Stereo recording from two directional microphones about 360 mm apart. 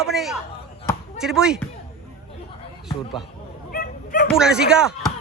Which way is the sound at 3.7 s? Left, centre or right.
Left.